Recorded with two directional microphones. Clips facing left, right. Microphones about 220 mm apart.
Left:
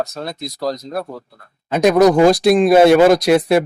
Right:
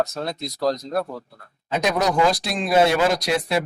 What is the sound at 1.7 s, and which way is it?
Speech, 50° left (ahead or behind).